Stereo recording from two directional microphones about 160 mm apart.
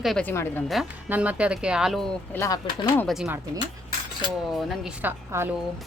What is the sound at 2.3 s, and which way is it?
Speech, 15° left (ahead or behind).